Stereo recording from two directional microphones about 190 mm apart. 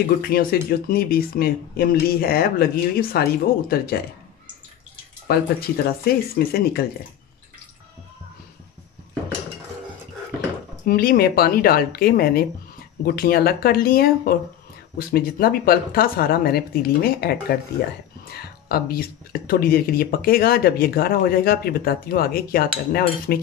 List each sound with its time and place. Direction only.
0.2 s speech: 50° left (ahead or behind)
5.3 s speech: 55° left (ahead or behind)
10.9 s speech: 50° left (ahead or behind)